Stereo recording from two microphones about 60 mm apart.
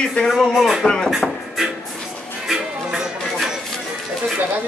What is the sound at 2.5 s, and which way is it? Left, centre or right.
Music, centre.